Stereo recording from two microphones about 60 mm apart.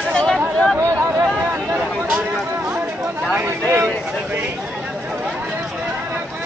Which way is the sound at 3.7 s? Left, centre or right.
Right.